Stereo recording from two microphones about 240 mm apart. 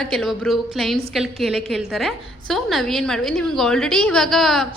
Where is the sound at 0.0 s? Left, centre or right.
Centre.